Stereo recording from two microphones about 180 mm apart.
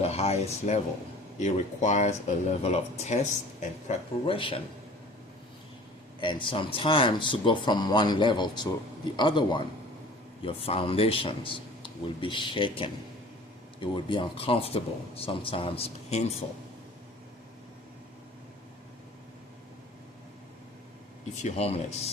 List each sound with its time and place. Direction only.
0.0 s speech: 35° left (ahead or behind)
6.1 s speech: 25° left (ahead or behind)
21.4 s speech: 35° left (ahead or behind)